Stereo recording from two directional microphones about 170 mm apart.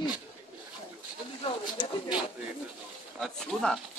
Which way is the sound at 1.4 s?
25° left (ahead or behind).